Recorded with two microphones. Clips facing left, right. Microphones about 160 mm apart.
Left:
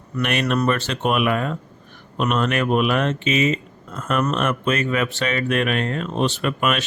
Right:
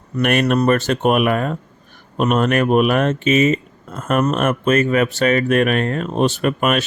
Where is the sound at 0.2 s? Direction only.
50° right (ahead or behind).